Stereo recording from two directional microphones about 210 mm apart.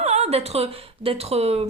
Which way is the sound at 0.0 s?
30° right (ahead or behind).